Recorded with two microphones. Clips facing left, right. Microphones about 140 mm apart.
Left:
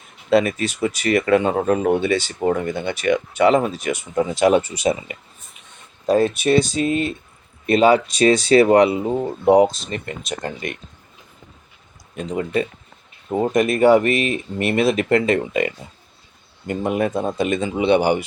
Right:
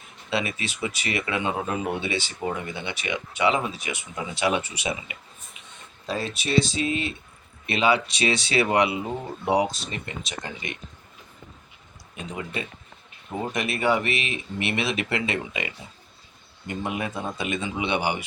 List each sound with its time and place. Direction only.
0.3 s speech: 45° left (ahead or behind)
13.4 s speech: 45° left (ahead or behind)